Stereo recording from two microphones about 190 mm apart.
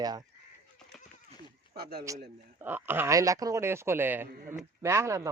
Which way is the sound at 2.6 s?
10° right (ahead or behind).